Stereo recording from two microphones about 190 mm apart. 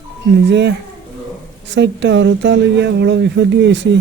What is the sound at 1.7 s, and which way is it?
Speech, 70° right (ahead or behind).